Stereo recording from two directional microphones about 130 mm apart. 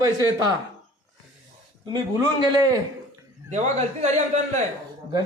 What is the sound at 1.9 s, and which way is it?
Speech, 25° right (ahead or behind).